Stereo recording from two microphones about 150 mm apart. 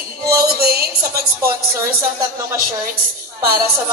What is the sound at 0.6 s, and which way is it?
Speech, 90° right.